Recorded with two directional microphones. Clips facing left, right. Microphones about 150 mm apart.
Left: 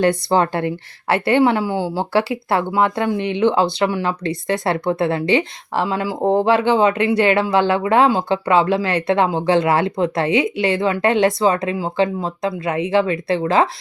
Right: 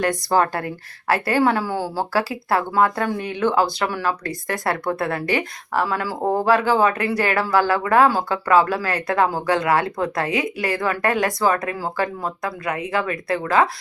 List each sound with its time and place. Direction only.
0.0 s a woman's voice: 25° left (ahead or behind)